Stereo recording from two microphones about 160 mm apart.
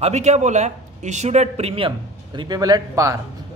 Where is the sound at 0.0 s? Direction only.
45° right (ahead or behind); by 3.2 s 20° right (ahead or behind).